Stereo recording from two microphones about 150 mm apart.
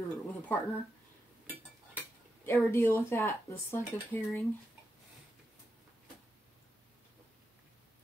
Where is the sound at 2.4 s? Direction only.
15° left (ahead or behind).